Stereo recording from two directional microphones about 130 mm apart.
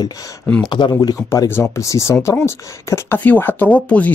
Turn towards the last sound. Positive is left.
turn(degrees=10)  # may be behind; listen again after turning